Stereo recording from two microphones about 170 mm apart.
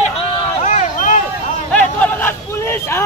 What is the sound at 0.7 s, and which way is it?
Vehicle, 45° left (ahead or behind).